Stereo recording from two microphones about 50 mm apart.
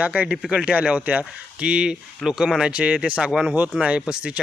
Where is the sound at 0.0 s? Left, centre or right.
Right.